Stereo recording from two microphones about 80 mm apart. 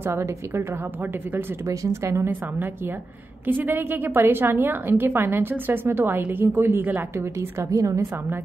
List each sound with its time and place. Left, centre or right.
0.0 s a woman's voice: right
1.7 s a woman's voice: right
7.3 s a woman's voice: right